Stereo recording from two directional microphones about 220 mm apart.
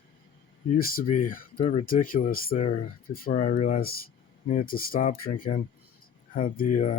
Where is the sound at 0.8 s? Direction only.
40° left (ahead or behind).